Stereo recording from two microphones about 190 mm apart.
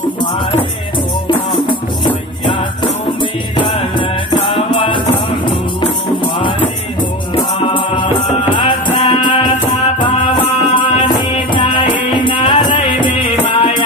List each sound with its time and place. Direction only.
1.2 s music: 25° left (ahead or behind)
2.8 s music: 25° left (ahead or behind)
7.6 s music: 25° left (ahead or behind)